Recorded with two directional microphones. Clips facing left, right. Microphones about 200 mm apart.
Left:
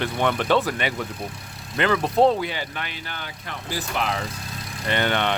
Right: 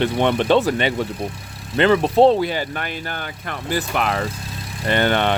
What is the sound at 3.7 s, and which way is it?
Speech, 60° right (ahead or behind).